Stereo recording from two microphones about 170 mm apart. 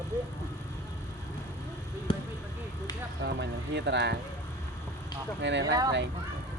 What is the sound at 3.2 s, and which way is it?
Speech, 85° right.